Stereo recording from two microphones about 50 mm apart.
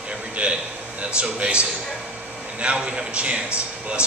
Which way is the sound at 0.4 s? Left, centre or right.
Right.